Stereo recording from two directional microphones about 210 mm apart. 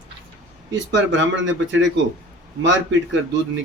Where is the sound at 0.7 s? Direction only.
60° right (ahead or behind).